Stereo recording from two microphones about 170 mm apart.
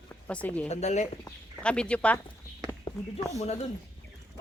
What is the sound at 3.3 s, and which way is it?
Speech, 40° left (ahead or behind).